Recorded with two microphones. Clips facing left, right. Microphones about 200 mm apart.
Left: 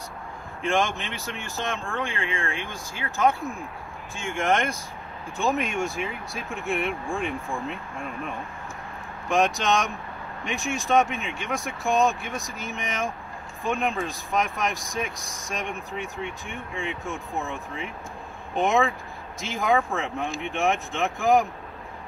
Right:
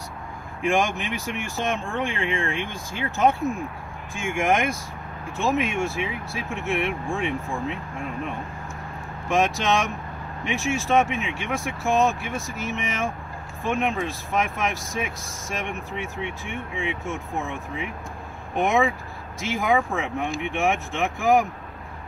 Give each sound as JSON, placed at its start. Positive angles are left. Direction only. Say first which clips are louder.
{"t": 0.6, "sound": "speech", "louder": "right 2 dB", "side_deg": -15}
{"t": 4.2, "sound": "speech", "louder": "right 2 dB", "side_deg": -10}
{"t": 9.3, "sound": "speech", "louder": "right 1 dB", "side_deg": -5}